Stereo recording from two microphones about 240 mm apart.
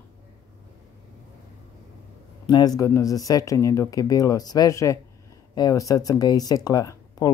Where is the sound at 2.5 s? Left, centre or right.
Centre.